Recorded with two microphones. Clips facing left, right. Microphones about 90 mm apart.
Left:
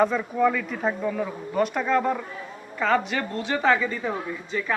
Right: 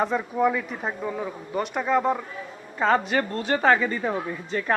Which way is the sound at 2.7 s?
35° right (ahead or behind).